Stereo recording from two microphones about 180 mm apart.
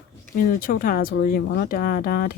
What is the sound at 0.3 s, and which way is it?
Speech, 50° left (ahead or behind).